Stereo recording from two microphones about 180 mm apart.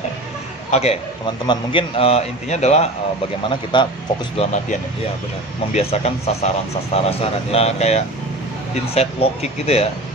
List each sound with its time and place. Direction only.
0.7 s speech: 35° left (ahead or behind)
3.7 s speech: 25° left (ahead or behind)
5.7 s speech: 35° left (ahead or behind)